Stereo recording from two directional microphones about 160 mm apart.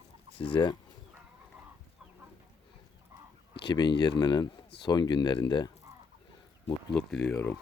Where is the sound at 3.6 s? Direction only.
30° left (ahead or behind).